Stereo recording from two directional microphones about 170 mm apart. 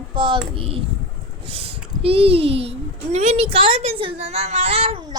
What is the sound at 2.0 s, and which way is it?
A child's voice, 35° right (ahead or behind).